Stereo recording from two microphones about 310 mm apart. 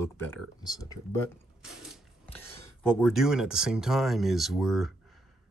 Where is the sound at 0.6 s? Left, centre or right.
Centre.